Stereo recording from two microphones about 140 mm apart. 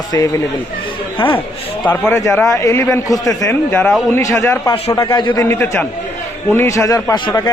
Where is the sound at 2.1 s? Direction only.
20° left (ahead or behind).